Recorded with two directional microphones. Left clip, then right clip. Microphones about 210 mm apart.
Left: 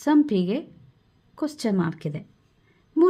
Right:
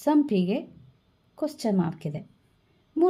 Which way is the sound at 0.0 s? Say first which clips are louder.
Left 2 dB; 15° left (ahead or behind).